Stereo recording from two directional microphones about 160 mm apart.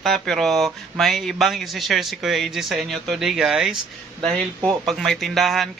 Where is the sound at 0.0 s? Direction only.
Centre (ahead or behind).